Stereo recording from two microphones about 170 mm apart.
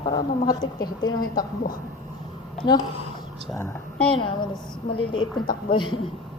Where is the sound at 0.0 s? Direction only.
25° left (ahead or behind).